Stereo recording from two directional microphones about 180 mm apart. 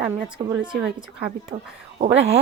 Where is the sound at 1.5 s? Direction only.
25° right (ahead or behind).